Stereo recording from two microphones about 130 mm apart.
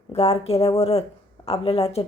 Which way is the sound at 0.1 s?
50° left (ahead or behind).